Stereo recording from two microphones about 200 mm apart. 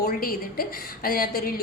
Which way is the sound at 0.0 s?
45° left (ahead or behind).